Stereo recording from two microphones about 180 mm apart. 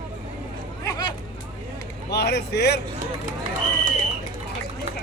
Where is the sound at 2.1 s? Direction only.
65° left (ahead or behind).